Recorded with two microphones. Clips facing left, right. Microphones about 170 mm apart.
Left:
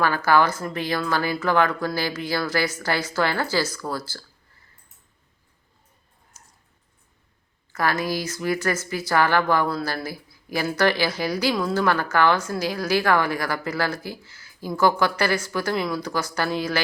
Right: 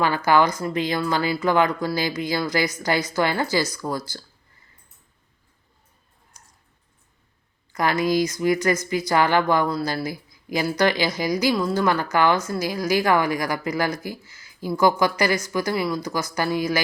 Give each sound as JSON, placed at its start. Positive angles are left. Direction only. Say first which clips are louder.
{"t": 0.3, "sound": "a woman's voice", "louder": "right 1 dB", "side_deg": -15}
{"t": 7.7, "sound": "a woman's voice", "louder": "right 3 dB", "side_deg": -15}